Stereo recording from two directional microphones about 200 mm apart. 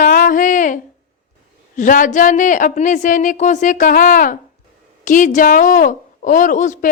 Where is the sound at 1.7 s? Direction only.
40° left (ahead or behind).